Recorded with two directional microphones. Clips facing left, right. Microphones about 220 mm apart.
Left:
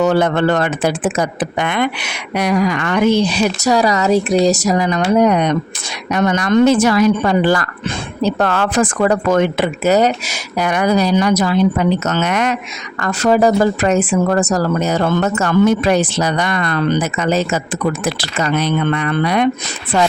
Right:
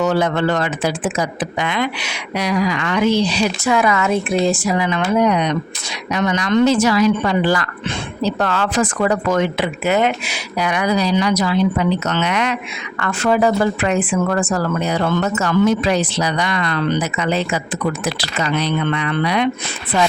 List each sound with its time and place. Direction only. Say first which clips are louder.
0.1 s speech: left 3 dB; 55° left (ahead or behind)